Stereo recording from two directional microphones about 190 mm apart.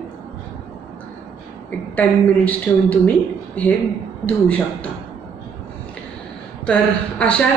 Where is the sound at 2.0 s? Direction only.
10° left (ahead or behind).